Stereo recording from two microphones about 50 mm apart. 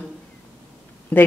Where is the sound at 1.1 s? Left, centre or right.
Left.